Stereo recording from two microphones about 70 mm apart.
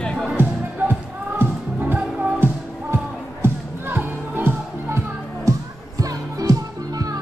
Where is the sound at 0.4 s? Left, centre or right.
Right.